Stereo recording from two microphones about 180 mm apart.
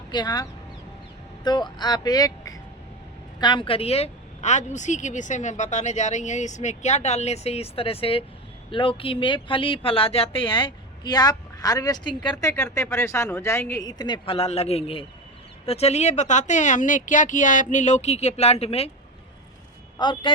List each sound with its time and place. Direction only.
0.1 s speech: 25° left (ahead or behind)
1.5 s a woman's voice: 25° left (ahead or behind)
20.0 s speech: 25° left (ahead or behind)